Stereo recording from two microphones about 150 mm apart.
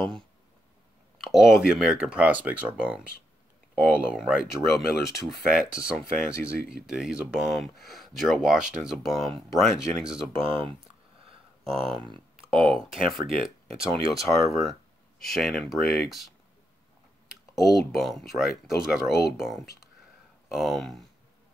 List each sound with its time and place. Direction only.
1.1 s speech: centre (ahead or behind)
10.3 s speech: 35° right (ahead or behind)
11.7 s speech: centre (ahead or behind)
12.0 s a sound: 35° right (ahead or behind)
12.5 s speech: centre (ahead or behind)
13.1 s speech: 35° right (ahead or behind)
14.5 s speech: centre (ahead or behind)
17.6 s speech: centre (ahead or behind)